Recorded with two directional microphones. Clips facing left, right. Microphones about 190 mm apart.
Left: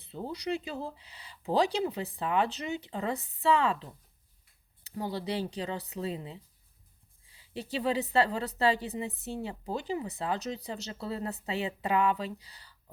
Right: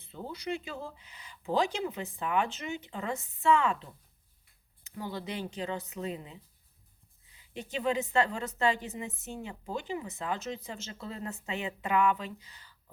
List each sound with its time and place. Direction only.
0.0 s speech: 35° left (ahead or behind)